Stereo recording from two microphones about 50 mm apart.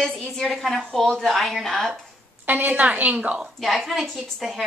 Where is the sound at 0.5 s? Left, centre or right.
Centre.